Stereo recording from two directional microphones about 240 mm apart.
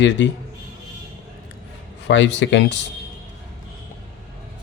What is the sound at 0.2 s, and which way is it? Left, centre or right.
Speech, left.